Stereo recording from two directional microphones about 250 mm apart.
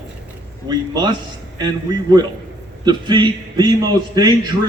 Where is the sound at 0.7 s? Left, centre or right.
Centre.